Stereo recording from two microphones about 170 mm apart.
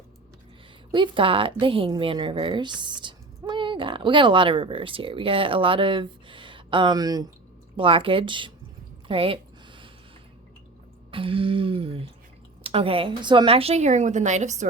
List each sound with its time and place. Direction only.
0.9 s a woman's voice: 30° right (ahead or behind)
9.0 s a sound: 35° right (ahead or behind)
11.1 s a woman's voice: 30° right (ahead or behind)